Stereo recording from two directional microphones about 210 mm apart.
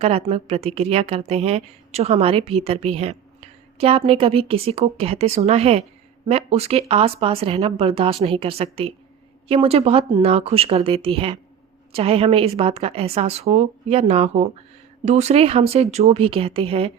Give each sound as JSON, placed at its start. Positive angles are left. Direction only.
{"t": 0.0, "sound": "a woman's voice", "side_deg": -30}